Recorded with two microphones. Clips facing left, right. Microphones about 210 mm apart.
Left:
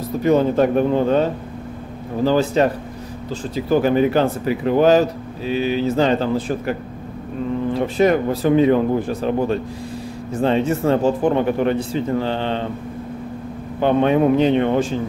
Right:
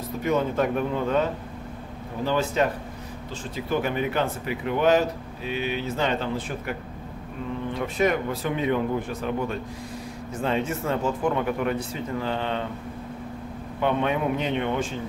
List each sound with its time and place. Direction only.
0.2 s speech: 35° left (ahead or behind)
13.7 s speech: 35° left (ahead or behind)